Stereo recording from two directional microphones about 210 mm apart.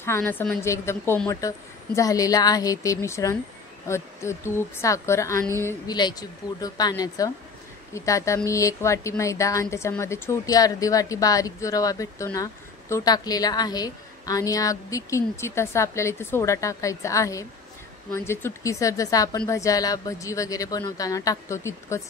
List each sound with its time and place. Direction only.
0.0 s a woman's voice: 10° left (ahead or behind)